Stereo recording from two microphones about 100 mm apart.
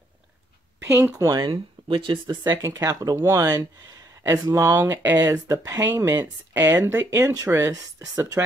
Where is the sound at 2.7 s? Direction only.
35° right (ahead or behind).